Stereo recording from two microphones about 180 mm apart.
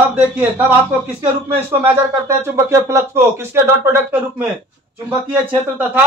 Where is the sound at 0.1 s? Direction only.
10° right (ahead or behind).